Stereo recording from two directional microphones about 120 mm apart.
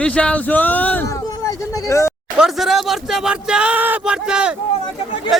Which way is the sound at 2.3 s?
Centre (ahead or behind).